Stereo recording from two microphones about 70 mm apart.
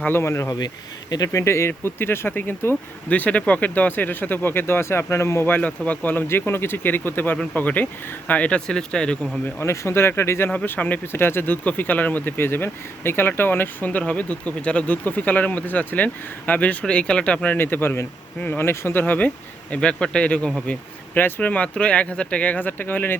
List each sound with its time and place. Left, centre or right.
0.1 s speech: left
3.1 s speech: left
5.5 s speech: left
9.6 s speech: left
10.7 s speech: left
19.7 s speech: centre
21.2 s speech: left